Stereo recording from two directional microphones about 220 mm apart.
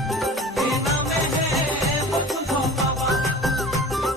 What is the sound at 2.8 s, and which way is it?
Music, centre (ahead or behind).